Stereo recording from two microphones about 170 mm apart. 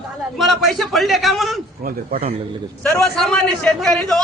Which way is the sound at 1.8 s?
60° right (ahead or behind).